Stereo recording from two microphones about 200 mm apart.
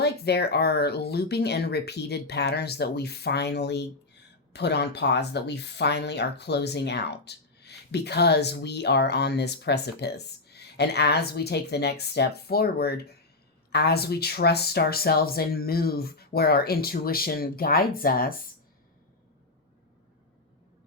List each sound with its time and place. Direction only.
0.0 s speech: 55° left (ahead or behind)